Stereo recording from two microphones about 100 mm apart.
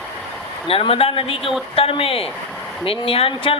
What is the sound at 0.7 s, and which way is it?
Speech, 70° left (ahead or behind).